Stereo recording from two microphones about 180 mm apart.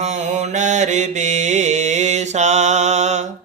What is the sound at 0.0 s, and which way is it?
Mantra, 40° right (ahead or behind).